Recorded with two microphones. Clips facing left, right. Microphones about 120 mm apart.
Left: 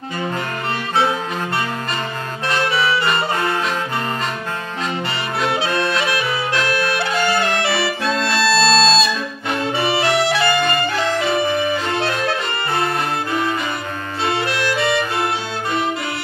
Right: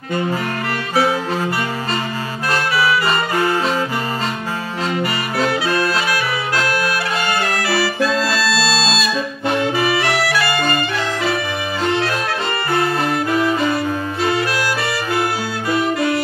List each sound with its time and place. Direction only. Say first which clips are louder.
5.5 s music: even; 25° left (ahead or behind)
6.9 s music: left 1 dB; 25° left (ahead or behind)
8.0 s music: right 1 dB; 5° right (ahead or behind)
8.8 s music: left 3 dB; 30° left (ahead or behind)